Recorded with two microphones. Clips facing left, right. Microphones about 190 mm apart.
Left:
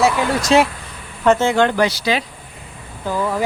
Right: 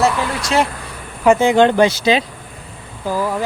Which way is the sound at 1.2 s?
10° right (ahead or behind).